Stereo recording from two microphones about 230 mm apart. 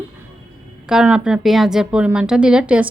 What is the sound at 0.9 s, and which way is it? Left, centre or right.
A woman's voice, centre.